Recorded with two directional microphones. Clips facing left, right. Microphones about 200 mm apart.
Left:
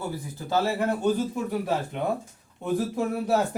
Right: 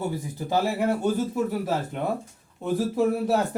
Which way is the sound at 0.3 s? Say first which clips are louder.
Even; 15° right (ahead or behind).